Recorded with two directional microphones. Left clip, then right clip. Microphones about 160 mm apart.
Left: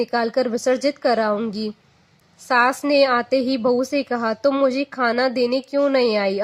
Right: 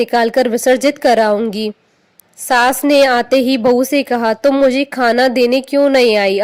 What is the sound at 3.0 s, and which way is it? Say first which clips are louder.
A woman's voice: right 7 dB; 40° right (ahead or behind).